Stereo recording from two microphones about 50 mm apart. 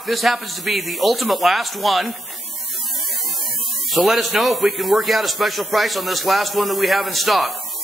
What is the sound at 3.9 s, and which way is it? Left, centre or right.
A man's voice, centre.